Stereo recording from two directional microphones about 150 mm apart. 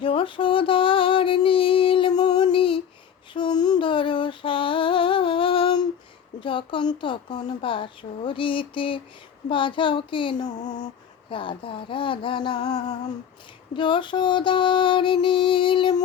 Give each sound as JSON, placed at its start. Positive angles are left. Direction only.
{"t": 0.0, "sound": "a sound", "side_deg": 35}
{"t": 6.4, "sound": "speech", "side_deg": 35}
{"t": 13.7, "sound": "speech", "side_deg": 30}